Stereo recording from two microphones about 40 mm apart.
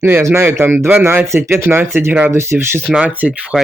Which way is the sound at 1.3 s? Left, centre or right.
Right.